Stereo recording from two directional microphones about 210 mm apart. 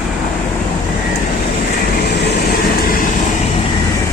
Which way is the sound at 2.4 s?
45° left (ahead or behind).